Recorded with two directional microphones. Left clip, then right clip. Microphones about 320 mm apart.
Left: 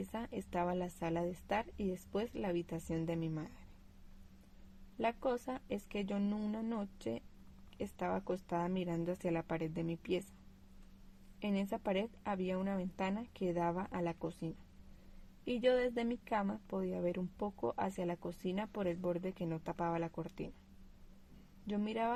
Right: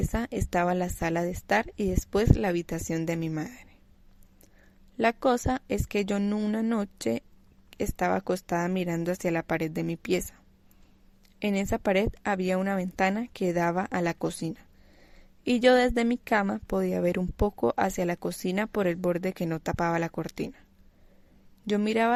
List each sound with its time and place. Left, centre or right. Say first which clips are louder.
0.1 s a woman's voice: right 13 dB; right
4.9 s a woman's voice: right 12 dB; right
11.3 s a woman's voice: right 11 dB; right
21.7 s a woman's voice: right 12 dB; right